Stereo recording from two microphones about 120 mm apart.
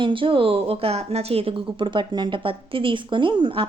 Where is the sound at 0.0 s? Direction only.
45° right (ahead or behind).